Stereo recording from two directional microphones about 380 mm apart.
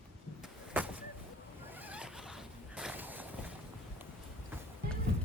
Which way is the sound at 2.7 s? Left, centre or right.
Centre.